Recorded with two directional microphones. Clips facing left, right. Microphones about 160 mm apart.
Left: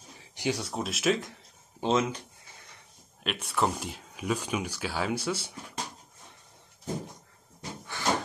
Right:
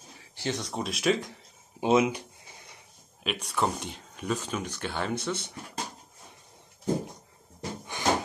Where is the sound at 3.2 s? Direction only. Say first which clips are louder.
Even; centre (ahead or behind).